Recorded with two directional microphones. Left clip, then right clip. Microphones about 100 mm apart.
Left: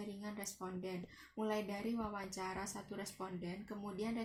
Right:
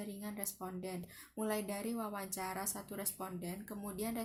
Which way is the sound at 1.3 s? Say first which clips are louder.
Right 1 dB; 25° right (ahead or behind).